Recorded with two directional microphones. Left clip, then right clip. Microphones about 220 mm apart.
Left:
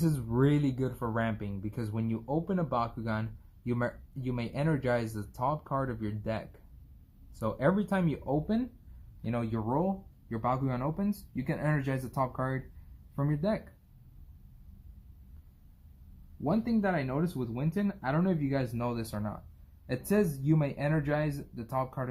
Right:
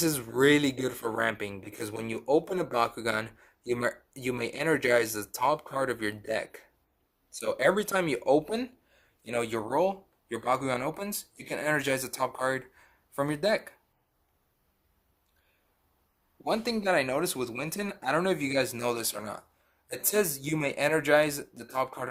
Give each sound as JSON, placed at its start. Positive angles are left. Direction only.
{"t": 0.0, "sound": "speech", "side_deg": -50}
{"t": 16.5, "sound": "speech", "side_deg": -50}
{"t": 20.1, "sound": "speech", "side_deg": -45}